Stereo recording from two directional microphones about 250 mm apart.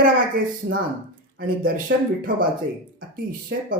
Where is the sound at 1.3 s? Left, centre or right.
Right.